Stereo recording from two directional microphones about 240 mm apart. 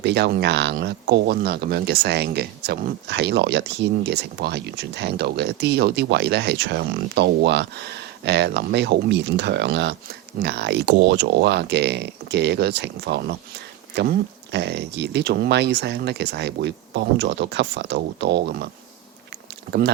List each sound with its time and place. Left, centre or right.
0.0 s speech: right